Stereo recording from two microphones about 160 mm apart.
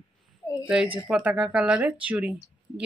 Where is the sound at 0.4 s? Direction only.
20° left (ahead or behind).